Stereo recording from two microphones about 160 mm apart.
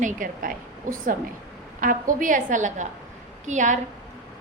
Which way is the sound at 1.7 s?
55° right (ahead or behind).